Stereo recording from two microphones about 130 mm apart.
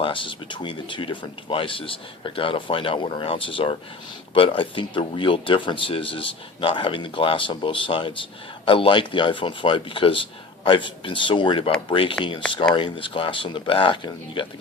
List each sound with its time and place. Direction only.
0.0 s speech: 40° left (ahead or behind)